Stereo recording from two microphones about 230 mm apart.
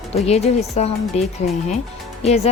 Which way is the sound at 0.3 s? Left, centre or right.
Left.